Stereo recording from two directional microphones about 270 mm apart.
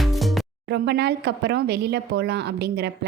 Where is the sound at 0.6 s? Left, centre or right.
Right.